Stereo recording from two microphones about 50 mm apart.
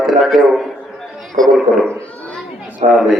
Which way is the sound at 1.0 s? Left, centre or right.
Centre.